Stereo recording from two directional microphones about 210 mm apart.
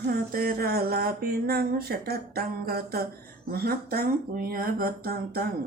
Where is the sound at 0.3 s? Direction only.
45° right (ahead or behind).